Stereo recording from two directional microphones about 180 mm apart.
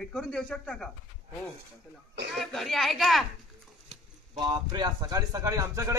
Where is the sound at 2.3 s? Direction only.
Centre (ahead or behind).